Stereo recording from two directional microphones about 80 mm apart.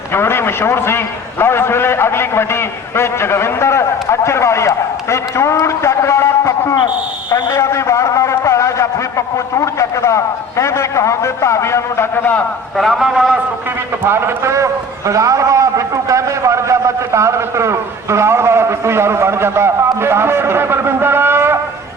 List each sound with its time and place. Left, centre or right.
0.1 s a man's voice: left
6.7 s speech: left
7.6 s a man's voice: left
12.7 s a man's voice: centre
14.0 s a man's voice: right